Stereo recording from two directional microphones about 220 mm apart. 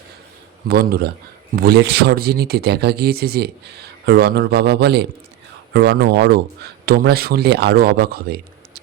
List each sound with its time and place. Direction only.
0.7 s speech: 45° right (ahead or behind)